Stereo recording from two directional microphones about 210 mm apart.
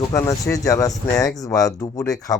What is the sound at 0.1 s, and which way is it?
Speech, 15° left (ahead or behind).